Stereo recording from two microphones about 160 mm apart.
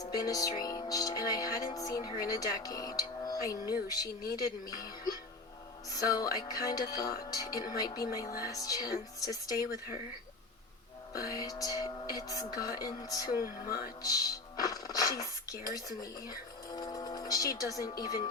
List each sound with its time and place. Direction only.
0.0 s speech: 25° left (ahead or behind)
4.2 s speech: 65° left (ahead or behind)
5.9 s speech: 25° left (ahead or behind)
11.3 s speech: 25° left (ahead or behind)
13.4 s speech: 65° left (ahead or behind)
14.0 s speech: 25° left (ahead or behind)
16.7 s speech: 25° left (ahead or behind)